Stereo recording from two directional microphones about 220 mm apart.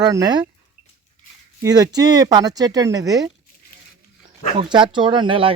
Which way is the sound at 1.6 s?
15° right (ahead or behind).